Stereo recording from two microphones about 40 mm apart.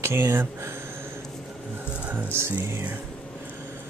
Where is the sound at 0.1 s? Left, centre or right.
Right.